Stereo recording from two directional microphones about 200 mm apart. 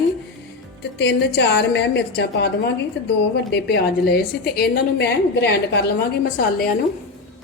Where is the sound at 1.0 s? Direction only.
60° left (ahead or behind).